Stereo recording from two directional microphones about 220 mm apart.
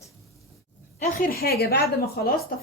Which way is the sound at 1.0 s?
40° left (ahead or behind).